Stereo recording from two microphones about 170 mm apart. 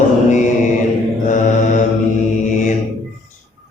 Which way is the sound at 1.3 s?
45° left (ahead or behind).